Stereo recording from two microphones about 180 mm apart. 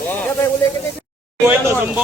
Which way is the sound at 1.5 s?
10° right (ahead or behind).